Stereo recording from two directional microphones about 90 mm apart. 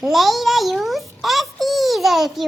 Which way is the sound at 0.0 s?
Centre (ahead or behind).